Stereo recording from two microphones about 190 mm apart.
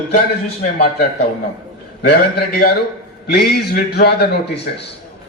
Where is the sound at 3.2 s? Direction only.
55° left (ahead or behind).